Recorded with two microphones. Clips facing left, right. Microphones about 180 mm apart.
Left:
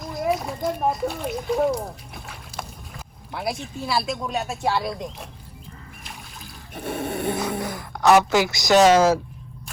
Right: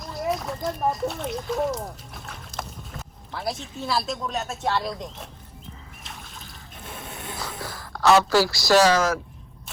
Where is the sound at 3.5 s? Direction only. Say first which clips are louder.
Left 1 dB; 5° left (ahead or behind).